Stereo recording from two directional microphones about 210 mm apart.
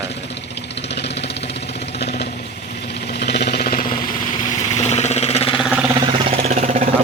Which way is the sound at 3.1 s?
50° left (ahead or behind).